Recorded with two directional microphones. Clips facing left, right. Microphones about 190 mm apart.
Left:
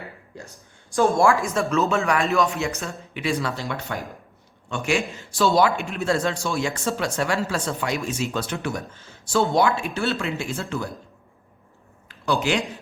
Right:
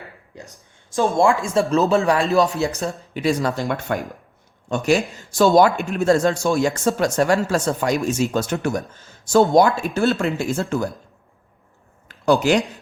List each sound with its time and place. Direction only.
0.3 s speech: 20° right (ahead or behind)
1.7 s speech: 35° right (ahead or behind)
12.0 s speech: 45° right (ahead or behind)